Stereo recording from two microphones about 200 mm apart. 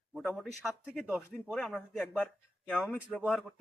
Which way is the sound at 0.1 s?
Centre (ahead or behind).